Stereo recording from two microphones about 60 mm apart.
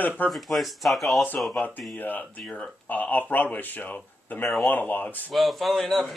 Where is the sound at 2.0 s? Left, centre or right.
Left.